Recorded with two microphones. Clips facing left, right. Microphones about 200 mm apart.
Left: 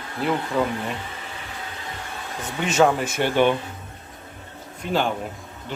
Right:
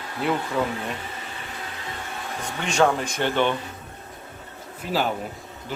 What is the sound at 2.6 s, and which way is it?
Speech, 5° left (ahead or behind).